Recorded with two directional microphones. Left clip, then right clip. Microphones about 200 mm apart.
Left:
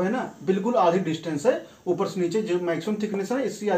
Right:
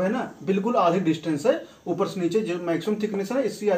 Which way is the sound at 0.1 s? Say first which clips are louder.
Even; 10° left (ahead or behind).